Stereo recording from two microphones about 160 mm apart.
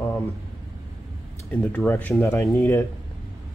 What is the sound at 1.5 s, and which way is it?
Speech, 10° left (ahead or behind).